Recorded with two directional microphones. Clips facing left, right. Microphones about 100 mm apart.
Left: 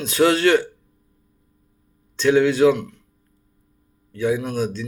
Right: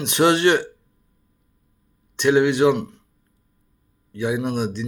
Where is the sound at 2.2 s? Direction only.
20° right (ahead or behind).